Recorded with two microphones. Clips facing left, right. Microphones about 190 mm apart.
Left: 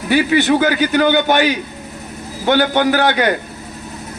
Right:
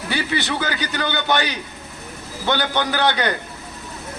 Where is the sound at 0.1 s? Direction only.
45° left (ahead or behind).